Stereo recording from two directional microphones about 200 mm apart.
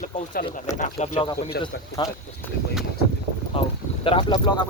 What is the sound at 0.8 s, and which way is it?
Speech, 35° left (ahead or behind).